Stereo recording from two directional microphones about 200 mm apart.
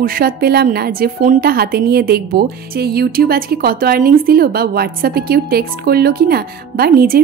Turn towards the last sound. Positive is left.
turn(degrees=-45)  # may be behind; listen again after turning